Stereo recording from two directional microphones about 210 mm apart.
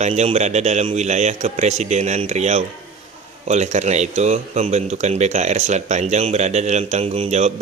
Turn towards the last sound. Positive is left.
turn(degrees=-30)  # may be behind; listen again after turning